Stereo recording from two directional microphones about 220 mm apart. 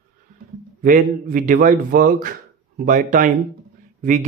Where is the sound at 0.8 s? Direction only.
35° right (ahead or behind).